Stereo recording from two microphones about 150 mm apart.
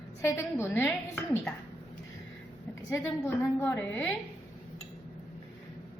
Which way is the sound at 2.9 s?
15° left (ahead or behind).